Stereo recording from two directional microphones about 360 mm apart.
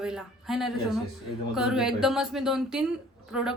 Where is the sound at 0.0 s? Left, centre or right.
Centre.